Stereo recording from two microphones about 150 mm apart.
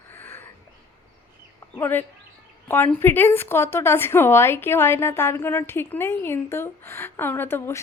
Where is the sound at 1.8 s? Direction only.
15° left (ahead or behind).